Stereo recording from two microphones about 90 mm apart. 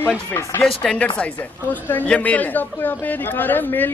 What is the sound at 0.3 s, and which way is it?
Speech, 25° left (ahead or behind).